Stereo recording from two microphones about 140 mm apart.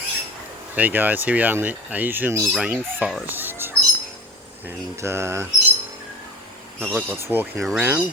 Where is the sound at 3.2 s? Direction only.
15° right (ahead or behind).